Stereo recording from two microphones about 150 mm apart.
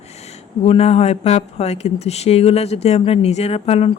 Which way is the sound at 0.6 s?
40° left (ahead or behind).